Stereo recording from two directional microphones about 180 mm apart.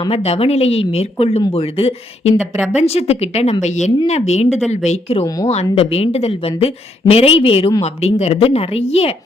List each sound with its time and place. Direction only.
0.0 s speech: 35° left (ahead or behind)